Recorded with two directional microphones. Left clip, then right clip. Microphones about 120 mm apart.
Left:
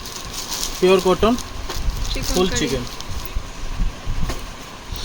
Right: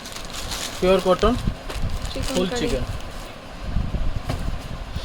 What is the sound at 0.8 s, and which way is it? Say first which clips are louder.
Speech: left 2 dB; 90° left.